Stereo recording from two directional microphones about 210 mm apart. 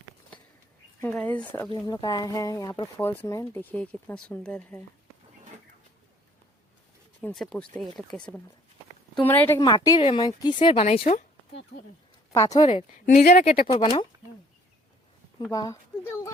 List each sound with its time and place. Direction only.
1.0 s speech: 5° left (ahead or behind)
1.7 s speech: 20° left (ahead or behind)
7.2 s speech: 5° left (ahead or behind)
9.6 s speech: 20° left (ahead or behind)
11.7 s speech: 50° left (ahead or behind)
12.3 s speech: 15° left (ahead or behind)
12.6 s speech: 35° left (ahead or behind)
13.7 s speech: 25° left (ahead or behind)
15.4 s speech: 15° left (ahead or behind)